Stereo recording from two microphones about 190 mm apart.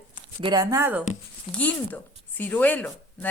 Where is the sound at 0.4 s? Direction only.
20° right (ahead or behind).